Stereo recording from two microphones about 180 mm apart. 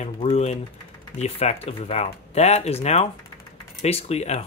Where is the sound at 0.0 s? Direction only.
35° left (ahead or behind).